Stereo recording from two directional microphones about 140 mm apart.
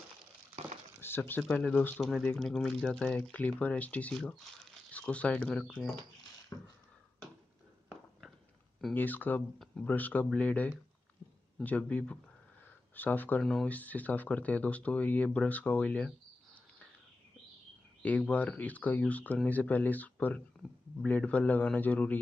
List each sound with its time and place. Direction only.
1.0 s speech: 15° left (ahead or behind)
6.5 s beatboxing: 15° left (ahead or behind)
8.9 s speech: 15° left (ahead or behind)
18.0 s speech: 10° left (ahead or behind)